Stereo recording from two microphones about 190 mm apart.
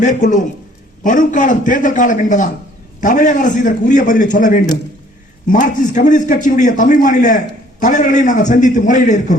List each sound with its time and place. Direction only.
0.0 s a man's voice: 40° left (ahead or behind)